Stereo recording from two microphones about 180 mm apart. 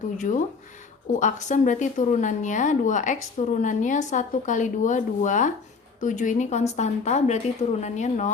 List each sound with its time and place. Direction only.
0.2 s a woman's voice: 45° left (ahead or behind)